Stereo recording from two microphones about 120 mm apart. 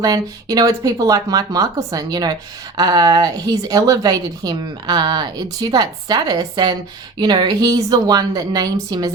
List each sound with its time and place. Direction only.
0.0 s a woman's voice: 30° right (ahead or behind)